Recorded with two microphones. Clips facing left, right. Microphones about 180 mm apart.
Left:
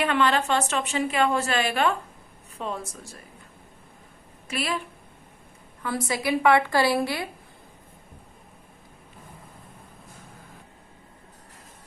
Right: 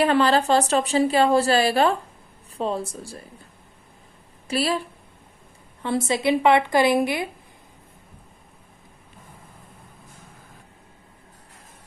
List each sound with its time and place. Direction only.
0.0 s a woman's voice: 35° right (ahead or behind)
4.4 s speech: 35° right (ahead or behind)
5.8 s a woman's voice: 25° right (ahead or behind)